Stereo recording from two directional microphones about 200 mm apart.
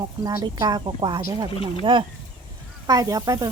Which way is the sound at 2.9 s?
15° right (ahead or behind).